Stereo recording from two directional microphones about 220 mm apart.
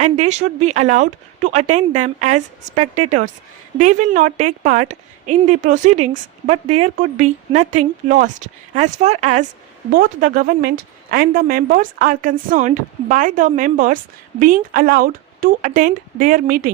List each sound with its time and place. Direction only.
0.0 s a woman's voice: 30° right (ahead or behind)